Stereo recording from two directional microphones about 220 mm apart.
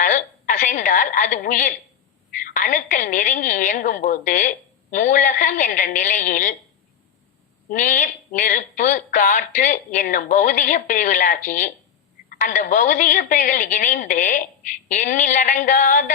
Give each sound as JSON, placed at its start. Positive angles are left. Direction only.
{"t": 0.0, "sound": "a sound", "side_deg": 35}
{"t": 2.4, "sound": "a woman's voice", "side_deg": 35}
{"t": 7.7, "sound": "a woman's voice", "side_deg": 35}